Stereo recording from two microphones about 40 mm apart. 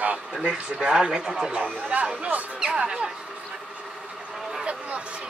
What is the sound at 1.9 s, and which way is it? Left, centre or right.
Speech, right.